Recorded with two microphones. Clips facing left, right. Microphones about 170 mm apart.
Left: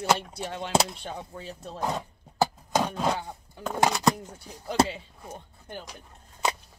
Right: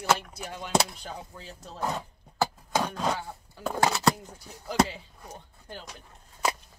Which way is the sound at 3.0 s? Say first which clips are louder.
Left 2 dB; 20° left (ahead or behind).